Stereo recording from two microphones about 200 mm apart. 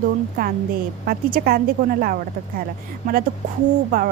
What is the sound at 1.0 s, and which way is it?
Speech, 50° right (ahead or behind).